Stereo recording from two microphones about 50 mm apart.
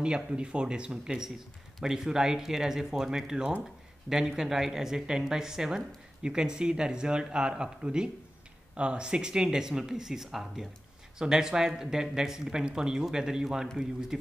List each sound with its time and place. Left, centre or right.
0.0 s speech: centre